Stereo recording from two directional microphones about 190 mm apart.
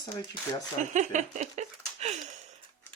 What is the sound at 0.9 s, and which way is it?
Speech, 40° right (ahead or behind).